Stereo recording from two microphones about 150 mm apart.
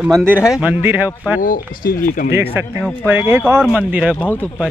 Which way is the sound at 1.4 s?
75° left (ahead or behind).